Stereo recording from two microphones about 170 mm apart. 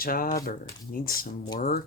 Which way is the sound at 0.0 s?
60° left (ahead or behind).